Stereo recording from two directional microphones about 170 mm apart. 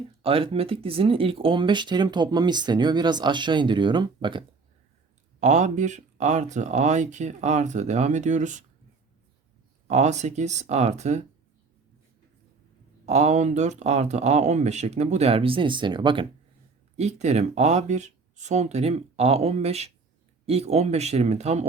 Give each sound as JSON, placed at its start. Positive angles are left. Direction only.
{"t": 0.2, "sound": "speech", "side_deg": -30}
{"t": 5.4, "sound": "speech", "side_deg": -45}
{"t": 9.8, "sound": "speech", "side_deg": -45}
{"t": 13.1, "sound": "speech", "side_deg": -40}
{"t": 17.0, "sound": "speech", "side_deg": -40}